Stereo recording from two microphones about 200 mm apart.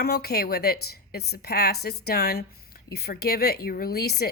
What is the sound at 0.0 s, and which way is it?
Speech, 50° left (ahead or behind).